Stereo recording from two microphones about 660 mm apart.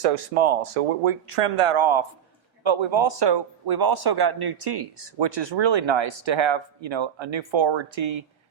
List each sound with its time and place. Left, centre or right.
0.0 s a man's voice: right